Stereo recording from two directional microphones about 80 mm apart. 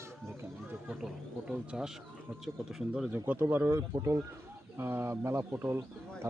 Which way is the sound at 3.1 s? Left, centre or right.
Right.